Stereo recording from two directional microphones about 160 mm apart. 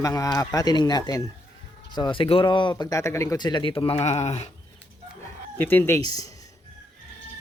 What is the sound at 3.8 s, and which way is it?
Speech, 40° left (ahead or behind).